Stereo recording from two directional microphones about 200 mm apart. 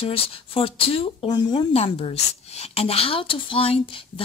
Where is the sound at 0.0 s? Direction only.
30° left (ahead or behind).